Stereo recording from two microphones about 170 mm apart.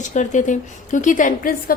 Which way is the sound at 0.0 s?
45° left (ahead or behind).